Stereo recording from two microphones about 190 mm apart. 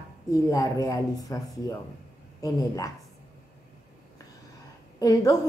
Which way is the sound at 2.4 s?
20° left (ahead or behind).